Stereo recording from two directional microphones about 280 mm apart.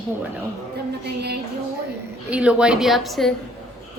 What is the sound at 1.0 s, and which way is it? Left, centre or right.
Speech, right.